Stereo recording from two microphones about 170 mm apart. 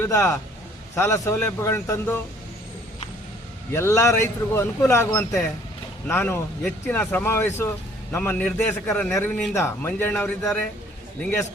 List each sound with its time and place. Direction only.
0.0 s a man's voice: 15° left (ahead or behind)
3.7 s a man's voice: 15° left (ahead or behind)